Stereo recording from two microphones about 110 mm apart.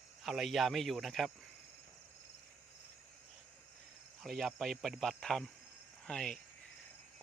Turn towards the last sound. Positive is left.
turn(degrees=5)  # may be behind; listen again after turning